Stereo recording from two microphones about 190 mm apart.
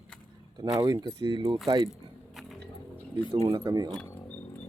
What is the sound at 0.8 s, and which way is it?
Speech, 20° right (ahead or behind).